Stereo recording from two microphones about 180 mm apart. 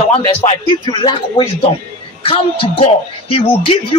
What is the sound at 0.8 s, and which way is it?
A man's voice, 25° left (ahead or behind).